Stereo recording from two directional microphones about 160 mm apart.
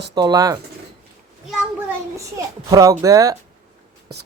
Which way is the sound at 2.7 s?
20° right (ahead or behind).